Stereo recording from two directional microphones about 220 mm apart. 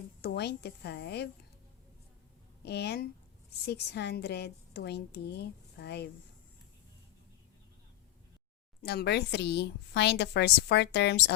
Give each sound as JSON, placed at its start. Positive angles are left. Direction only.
{"t": 0.2, "sound": "a woman's voice", "side_deg": 50}
{"t": 2.6, "sound": "a woman's voice", "side_deg": 50}
{"t": 8.8, "sound": "a woman's voice", "side_deg": 45}